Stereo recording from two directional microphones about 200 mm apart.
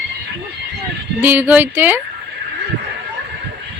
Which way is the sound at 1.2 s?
10° right (ahead or behind).